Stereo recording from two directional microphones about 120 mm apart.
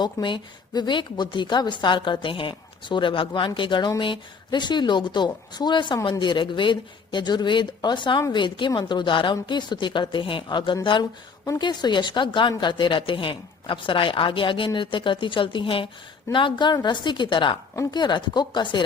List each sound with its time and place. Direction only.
0.0 s speech: 40° left (ahead or behind)
11.4 s speech: 35° left (ahead or behind)